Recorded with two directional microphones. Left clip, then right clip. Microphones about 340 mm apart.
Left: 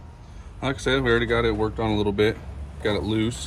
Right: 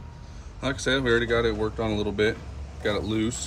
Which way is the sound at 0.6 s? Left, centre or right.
Centre.